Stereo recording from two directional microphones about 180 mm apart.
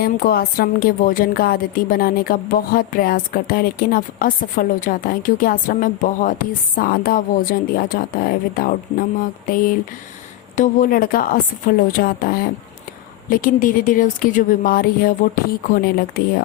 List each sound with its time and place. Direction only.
0.0 s a woman's voice: 55° left (ahead or behind)